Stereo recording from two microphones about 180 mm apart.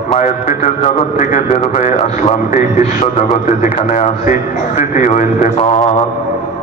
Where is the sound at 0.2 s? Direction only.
45° left (ahead or behind).